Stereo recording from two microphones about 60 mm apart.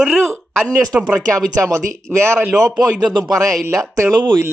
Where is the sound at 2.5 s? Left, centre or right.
Right.